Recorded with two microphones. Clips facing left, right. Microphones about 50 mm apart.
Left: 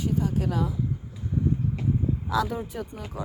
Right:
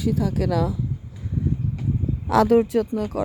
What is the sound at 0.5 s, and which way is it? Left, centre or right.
Speech, right.